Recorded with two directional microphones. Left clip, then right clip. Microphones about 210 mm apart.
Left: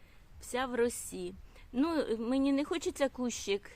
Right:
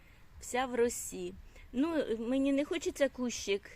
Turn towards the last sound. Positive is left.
turn(degrees=5)  # may be behind; listen again after turning